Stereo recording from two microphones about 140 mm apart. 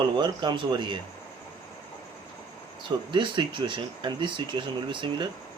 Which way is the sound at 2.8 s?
35° right (ahead or behind).